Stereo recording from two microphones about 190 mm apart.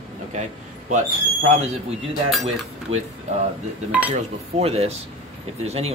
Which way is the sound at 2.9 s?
35° right (ahead or behind).